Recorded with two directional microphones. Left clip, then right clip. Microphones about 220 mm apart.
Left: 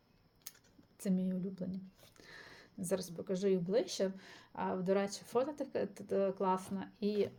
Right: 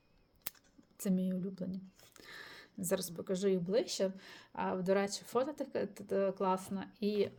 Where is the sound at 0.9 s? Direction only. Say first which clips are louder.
Right 1 dB; 10° right (ahead or behind).